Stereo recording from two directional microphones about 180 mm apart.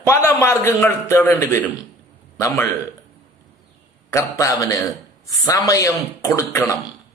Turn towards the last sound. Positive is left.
turn(degrees=15)  # may be behind; listen again after turning